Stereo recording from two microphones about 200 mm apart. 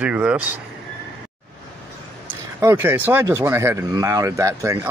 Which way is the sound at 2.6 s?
10° right (ahead or behind).